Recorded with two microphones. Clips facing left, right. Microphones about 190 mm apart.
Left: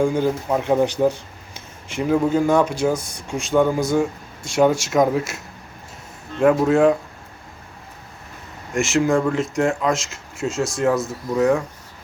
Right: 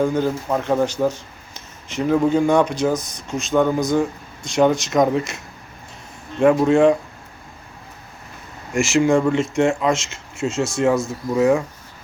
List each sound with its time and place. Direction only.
0.0 s speech: 10° left (ahead or behind)
3.0 s speech: 30° left (ahead or behind)
3.2 s speech: 10° left (ahead or behind)
6.5 s speech: centre (ahead or behind)
8.7 s speech: centre (ahead or behind)